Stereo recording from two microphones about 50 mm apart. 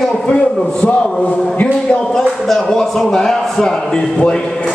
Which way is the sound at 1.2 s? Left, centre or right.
Left.